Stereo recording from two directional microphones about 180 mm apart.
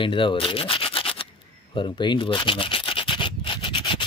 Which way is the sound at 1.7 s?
25° left (ahead or behind).